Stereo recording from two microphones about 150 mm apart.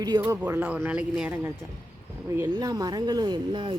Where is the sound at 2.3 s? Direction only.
25° right (ahead or behind).